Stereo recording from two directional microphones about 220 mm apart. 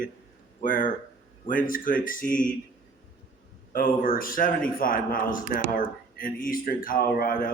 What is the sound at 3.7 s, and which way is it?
Speech, 40° left (ahead or behind).